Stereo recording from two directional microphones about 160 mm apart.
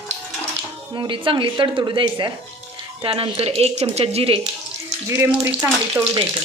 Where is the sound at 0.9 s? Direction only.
30° right (ahead or behind).